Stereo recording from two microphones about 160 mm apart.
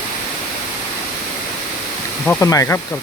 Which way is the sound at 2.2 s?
10° left (ahead or behind).